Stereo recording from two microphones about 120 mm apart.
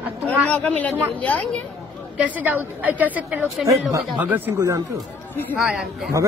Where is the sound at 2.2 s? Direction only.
15° right (ahead or behind).